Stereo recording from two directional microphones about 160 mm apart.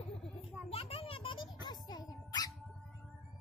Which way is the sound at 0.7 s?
35° left (ahead or behind).